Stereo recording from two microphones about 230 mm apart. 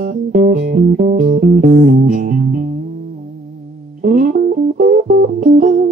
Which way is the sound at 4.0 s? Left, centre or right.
Right.